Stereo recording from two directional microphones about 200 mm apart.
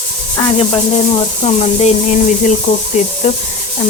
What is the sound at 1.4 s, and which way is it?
Sizzle, 35° left (ahead or behind).